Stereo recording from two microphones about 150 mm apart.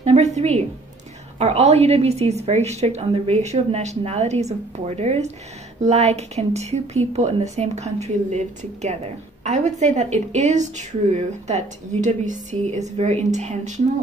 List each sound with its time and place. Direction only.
0.0 s a woman's voice: 45° right (ahead or behind)